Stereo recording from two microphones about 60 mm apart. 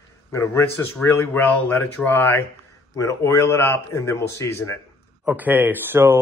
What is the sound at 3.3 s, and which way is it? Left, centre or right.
A man's voice, left.